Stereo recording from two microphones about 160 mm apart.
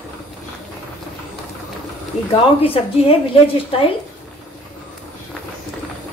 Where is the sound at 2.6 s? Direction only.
35° left (ahead or behind).